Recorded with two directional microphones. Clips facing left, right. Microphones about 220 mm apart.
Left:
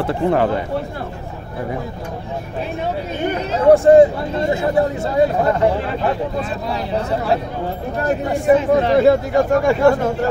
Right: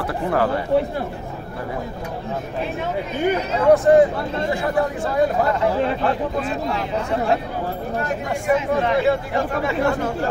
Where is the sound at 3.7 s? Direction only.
30° left (ahead or behind).